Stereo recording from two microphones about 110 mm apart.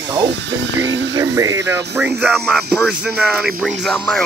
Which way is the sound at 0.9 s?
35° right (ahead or behind).